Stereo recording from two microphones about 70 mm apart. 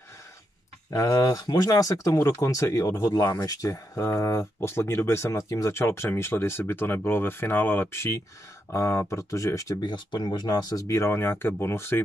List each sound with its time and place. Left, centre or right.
0.8 s speech: left
4.6 s speech: left
9.8 s speech: left
10.9 s speech: left